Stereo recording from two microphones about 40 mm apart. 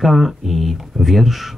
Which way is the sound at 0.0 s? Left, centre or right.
Centre.